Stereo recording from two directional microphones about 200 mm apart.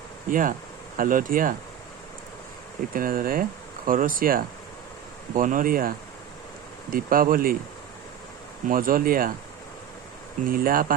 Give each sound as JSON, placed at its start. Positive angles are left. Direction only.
{"t": 0.3, "sound": "speech", "side_deg": -40}
{"t": 2.9, "sound": "speech", "side_deg": -45}
{"t": 6.9, "sound": "speech", "side_deg": -45}
{"t": 8.7, "sound": "speech", "side_deg": -45}
{"t": 10.5, "sound": "speech", "side_deg": -45}